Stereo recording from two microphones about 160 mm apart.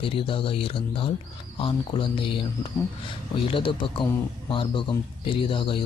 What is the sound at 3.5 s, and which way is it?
Speech, 30° left (ahead or behind).